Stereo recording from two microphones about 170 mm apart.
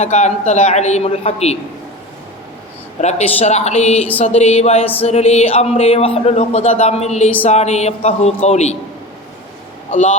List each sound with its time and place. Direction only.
0.0 s speech: 40° left (ahead or behind)
3.0 s speech: 40° left (ahead or behind)